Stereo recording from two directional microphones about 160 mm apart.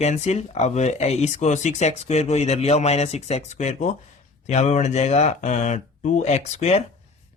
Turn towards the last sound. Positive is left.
turn(degrees=45)  # may be behind; listen again after turning